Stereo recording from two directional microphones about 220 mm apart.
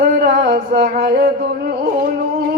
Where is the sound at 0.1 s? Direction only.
40° right (ahead or behind).